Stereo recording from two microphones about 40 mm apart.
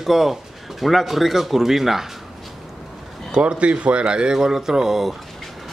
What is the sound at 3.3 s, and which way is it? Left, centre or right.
Speech, right.